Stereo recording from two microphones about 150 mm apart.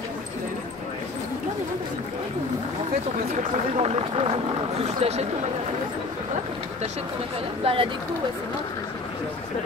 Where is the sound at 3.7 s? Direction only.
40° right (ahead or behind).